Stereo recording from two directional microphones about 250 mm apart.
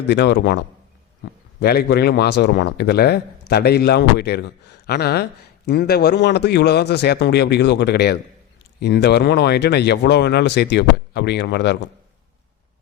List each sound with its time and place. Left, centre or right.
0.1 s a man's voice: left